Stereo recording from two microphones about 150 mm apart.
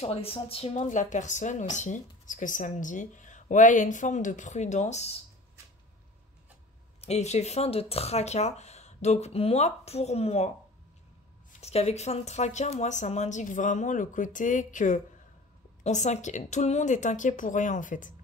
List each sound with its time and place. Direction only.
0.0 s a woman's voice: 40° left (ahead or behind)
0.7 s speech: 55° left (ahead or behind)
7.0 s speech: 45° left (ahead or behind)
11.6 s speech: 45° left (ahead or behind); by 18.1 s 60° left (ahead or behind)